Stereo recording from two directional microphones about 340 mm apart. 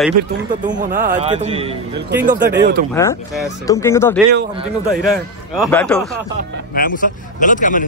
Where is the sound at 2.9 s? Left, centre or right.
Centre.